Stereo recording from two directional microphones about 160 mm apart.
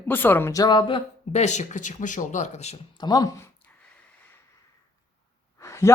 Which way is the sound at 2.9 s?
25° left (ahead or behind).